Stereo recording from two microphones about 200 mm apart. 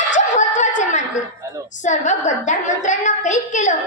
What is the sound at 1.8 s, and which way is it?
A woman's voice, 35° left (ahead or behind).